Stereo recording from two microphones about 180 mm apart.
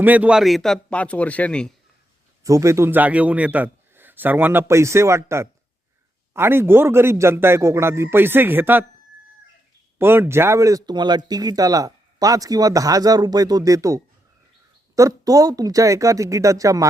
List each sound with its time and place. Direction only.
0.0 s a man's voice: 10° right (ahead or behind)
2.4 s a man's voice: 15° right (ahead or behind)
10.0 s speech: 15° right (ahead or behind)